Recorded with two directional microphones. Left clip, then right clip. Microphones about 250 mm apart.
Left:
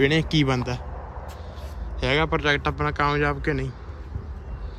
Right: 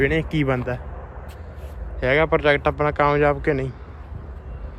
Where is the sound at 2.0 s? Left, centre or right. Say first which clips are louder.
Right 5 dB; centre.